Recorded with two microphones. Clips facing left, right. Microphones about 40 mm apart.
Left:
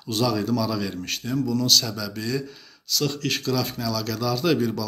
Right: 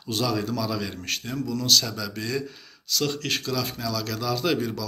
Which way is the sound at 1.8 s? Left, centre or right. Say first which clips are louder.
Left 1 dB; right.